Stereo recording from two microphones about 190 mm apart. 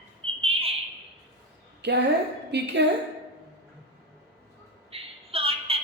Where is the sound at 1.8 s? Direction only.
65° right (ahead or behind).